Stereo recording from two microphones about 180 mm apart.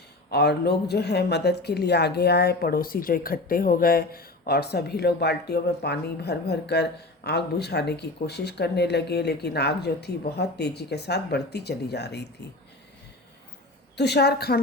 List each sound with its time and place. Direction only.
0.3 s speech: 65° left (ahead or behind)
13.9 s speech: 70° left (ahead or behind)